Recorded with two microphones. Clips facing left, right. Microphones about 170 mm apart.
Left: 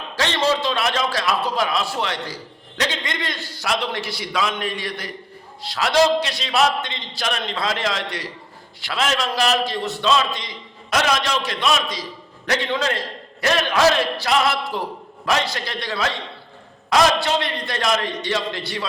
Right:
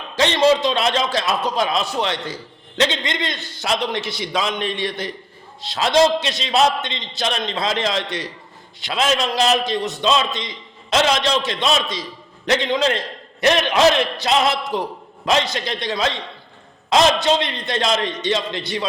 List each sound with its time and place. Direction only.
0.2 s a man's voice: 20° right (ahead or behind)